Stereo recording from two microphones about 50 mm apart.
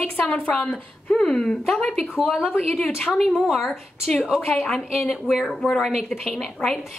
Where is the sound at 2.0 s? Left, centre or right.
Centre.